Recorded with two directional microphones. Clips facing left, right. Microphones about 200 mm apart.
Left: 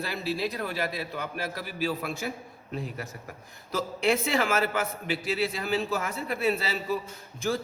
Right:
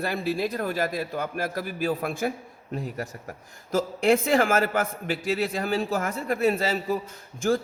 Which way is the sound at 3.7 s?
50° right (ahead or behind).